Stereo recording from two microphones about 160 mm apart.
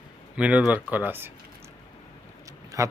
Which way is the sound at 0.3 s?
10° right (ahead or behind).